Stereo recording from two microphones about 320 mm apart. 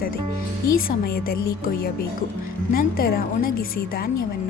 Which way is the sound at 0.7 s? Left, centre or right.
Left.